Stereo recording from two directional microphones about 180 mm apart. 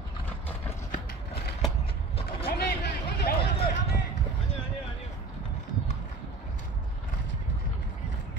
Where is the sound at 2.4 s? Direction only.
65° left (ahead or behind).